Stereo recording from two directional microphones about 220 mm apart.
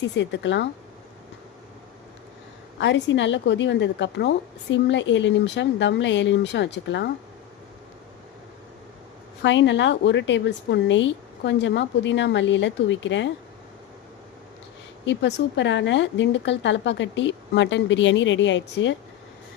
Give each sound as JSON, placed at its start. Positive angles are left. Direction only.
{"t": 0.2, "sound": "a woman's voice", "side_deg": 55}
{"t": 2.7, "sound": "a woman's voice", "side_deg": 55}
{"t": 9.4, "sound": "a woman's voice", "side_deg": 55}
{"t": 15.0, "sound": "a woman's voice", "side_deg": 55}